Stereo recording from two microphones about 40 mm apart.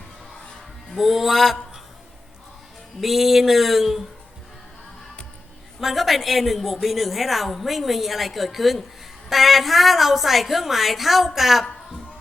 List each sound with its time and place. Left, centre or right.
0.9 s a woman's voice: centre
3.0 s a woman's voice: centre
5.8 s a woman's voice: centre